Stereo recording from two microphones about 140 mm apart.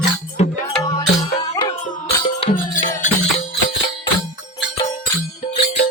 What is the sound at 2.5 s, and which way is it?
Music, 70° left (ahead or behind).